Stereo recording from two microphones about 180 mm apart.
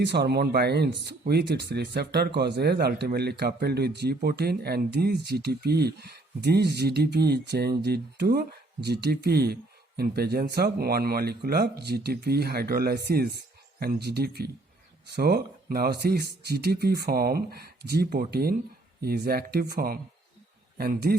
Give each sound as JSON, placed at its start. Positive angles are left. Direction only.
{"t": 0.0, "sound": "speech", "side_deg": -70}